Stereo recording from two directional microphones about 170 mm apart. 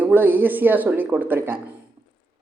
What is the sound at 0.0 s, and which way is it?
A woman's voice, 10° right (ahead or behind).